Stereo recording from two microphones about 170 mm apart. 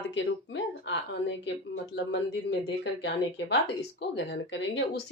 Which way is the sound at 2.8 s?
90° left.